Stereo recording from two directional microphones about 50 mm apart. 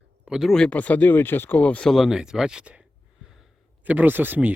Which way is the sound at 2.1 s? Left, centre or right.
Centre.